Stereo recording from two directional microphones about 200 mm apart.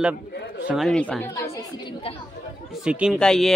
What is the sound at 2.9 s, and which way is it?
Speech, 5° right (ahead or behind).